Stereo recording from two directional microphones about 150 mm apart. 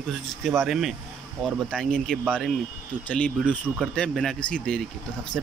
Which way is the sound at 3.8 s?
Centre (ahead or behind).